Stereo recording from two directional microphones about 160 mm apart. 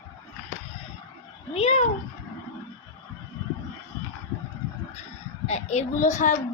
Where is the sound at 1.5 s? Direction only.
40° left (ahead or behind).